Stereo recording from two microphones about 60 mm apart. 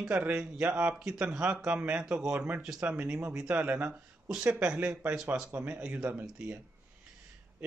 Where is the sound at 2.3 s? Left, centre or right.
Right.